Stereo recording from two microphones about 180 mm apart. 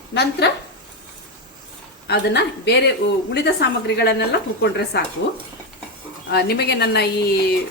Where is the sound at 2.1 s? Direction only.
70° left (ahead or behind).